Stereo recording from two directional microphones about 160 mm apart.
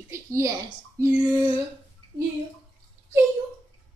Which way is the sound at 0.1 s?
20° right (ahead or behind).